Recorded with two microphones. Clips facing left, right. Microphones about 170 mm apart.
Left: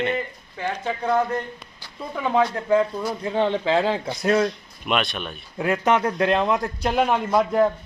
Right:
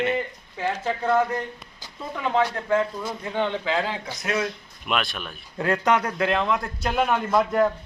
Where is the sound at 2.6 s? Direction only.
15° left (ahead or behind).